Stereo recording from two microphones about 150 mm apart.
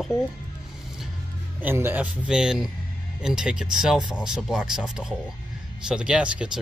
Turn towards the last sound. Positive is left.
turn(degrees=-5)  # may be behind; listen again after turning